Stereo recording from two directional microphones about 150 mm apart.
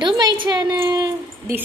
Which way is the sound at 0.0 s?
30° right (ahead or behind).